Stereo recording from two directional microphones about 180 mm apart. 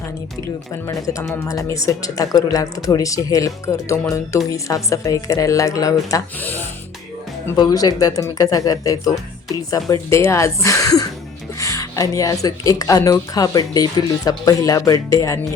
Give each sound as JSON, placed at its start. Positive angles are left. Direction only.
{"t": 1.5, "sound": "a woman's voice", "side_deg": 20}